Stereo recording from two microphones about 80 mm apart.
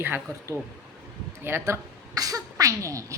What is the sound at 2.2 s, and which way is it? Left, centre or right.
Speech, right.